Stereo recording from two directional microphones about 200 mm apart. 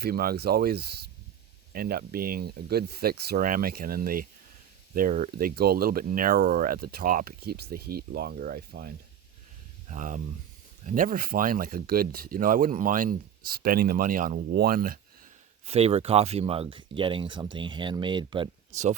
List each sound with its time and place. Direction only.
0.0 s speech: 50° right (ahead or behind)
15.6 s speech: 30° right (ahead or behind)
18.7 s speech: 35° right (ahead or behind)